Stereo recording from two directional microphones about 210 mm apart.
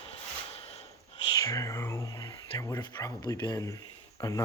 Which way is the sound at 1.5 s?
15° left (ahead or behind).